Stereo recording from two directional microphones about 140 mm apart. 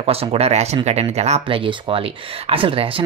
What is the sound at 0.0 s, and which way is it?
Speech, 45° right (ahead or behind).